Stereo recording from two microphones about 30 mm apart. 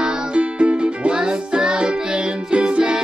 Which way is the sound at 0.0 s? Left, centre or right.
Right.